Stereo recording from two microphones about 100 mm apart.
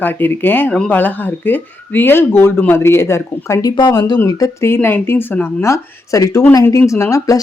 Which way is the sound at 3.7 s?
45° left (ahead or behind).